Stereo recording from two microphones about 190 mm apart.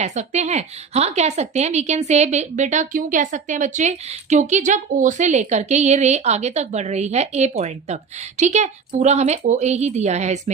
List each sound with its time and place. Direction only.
0.0 s a woman's voice: 35° right (ahead or behind)